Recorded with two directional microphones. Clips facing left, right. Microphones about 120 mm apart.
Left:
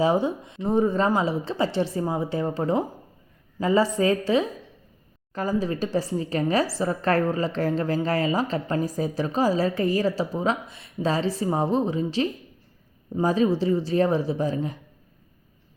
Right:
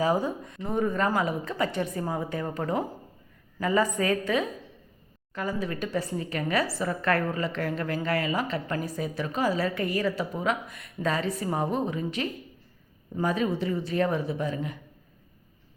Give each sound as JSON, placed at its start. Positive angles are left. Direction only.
{"t": 0.0, "sound": "a woman's voice", "side_deg": 25}